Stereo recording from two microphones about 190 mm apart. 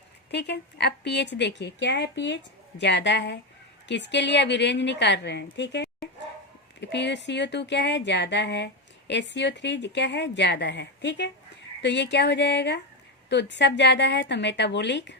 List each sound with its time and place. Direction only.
0.3 s a woman's voice: 60° left (ahead or behind)